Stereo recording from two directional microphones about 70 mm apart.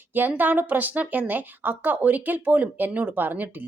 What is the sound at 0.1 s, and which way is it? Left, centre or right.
A woman's voice, right.